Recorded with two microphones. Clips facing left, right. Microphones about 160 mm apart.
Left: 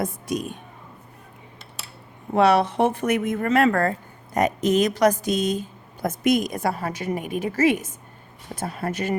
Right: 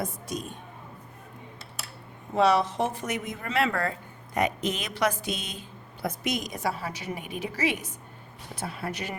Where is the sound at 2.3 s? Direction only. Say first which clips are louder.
Left 5 dB; 65° left (ahead or behind); by 9.1 s 45° left (ahead or behind).